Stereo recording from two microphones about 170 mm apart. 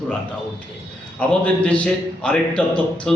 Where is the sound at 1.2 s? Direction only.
5° left (ahead or behind).